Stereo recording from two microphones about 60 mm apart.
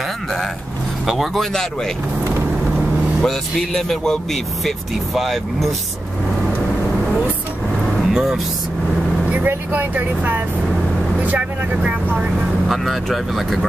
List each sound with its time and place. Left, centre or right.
1.0 s speech: centre
3.2 s speech: centre
8.1 s speech: centre
9.7 s speech: right
12.6 s speech: centre